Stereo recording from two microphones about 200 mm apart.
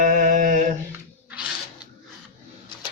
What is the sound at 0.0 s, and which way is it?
Mantra, 40° right (ahead or behind).